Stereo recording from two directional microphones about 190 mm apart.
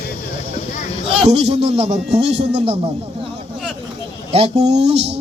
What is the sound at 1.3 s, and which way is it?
Speech, 35° right (ahead or behind).